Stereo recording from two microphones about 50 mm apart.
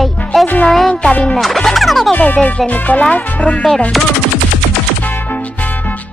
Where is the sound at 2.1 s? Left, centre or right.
Left.